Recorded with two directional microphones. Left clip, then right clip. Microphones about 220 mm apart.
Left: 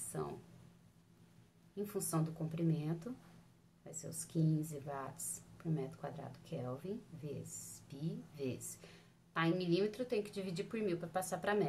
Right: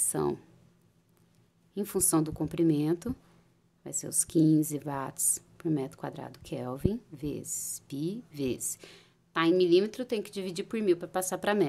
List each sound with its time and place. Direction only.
0.1 s a woman's voice: 55° right (ahead or behind)
1.8 s a woman's voice: 50° right (ahead or behind)
7.9 s a woman's voice: 50° right (ahead or behind)